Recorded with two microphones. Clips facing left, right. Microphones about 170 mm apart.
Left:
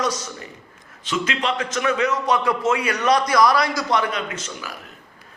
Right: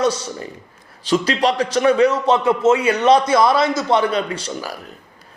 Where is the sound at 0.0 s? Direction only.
30° right (ahead or behind).